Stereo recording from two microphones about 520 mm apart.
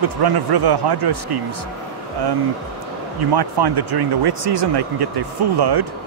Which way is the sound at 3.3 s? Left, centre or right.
Right.